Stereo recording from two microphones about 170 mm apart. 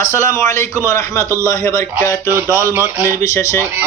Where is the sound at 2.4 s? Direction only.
20° left (ahead or behind).